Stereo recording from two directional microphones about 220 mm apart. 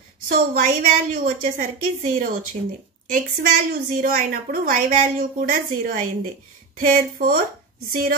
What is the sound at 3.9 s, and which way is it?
A woman's voice, 35° right (ahead or behind).